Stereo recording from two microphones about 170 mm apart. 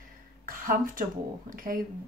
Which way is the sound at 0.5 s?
55° right (ahead or behind).